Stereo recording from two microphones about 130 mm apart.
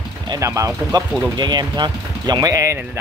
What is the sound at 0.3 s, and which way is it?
Speech, 25° right (ahead or behind).